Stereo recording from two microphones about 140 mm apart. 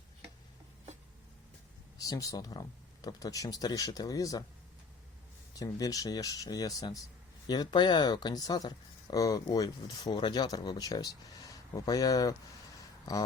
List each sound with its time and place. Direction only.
2.0 s speech: 25° left (ahead or behind)
5.5 s speech: 25° left (ahead or behind)